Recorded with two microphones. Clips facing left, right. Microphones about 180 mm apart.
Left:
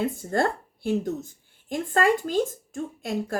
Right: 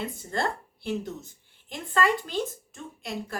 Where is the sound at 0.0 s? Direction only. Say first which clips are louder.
Left 6 dB; 50° left (ahead or behind).